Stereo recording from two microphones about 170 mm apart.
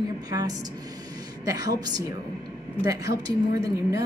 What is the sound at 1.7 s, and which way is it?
A woman's voice, 20° right (ahead or behind).